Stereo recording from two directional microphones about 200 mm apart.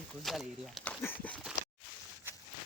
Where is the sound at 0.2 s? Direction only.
Centre (ahead or behind).